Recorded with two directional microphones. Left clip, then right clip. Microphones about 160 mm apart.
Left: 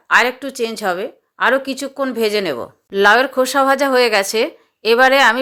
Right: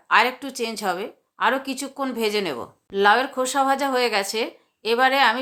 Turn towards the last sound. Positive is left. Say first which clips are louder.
# left 7 dB
turn(degrees=35)  # may be behind; listen again after turning